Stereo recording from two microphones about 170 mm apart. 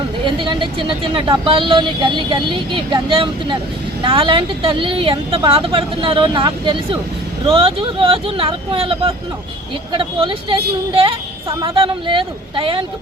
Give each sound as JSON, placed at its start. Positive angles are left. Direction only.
{"t": 0.3, "sound": "a woman's voice", "side_deg": -30}